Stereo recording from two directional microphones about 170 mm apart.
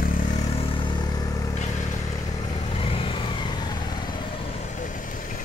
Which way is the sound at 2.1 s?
25° left (ahead or behind).